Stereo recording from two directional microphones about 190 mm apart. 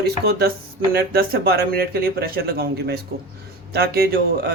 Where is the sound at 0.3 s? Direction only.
55° right (ahead or behind).